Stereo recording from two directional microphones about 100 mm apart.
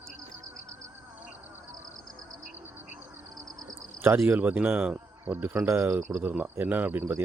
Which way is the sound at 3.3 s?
40° right (ahead or behind).